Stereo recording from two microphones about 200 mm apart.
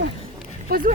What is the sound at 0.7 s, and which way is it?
Speech, 50° right (ahead or behind).